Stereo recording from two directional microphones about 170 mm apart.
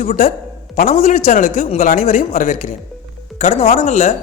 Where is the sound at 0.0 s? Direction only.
50° left (ahead or behind).